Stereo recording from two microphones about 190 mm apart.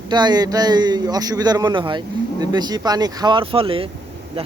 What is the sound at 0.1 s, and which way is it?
Speech, 20° right (ahead or behind).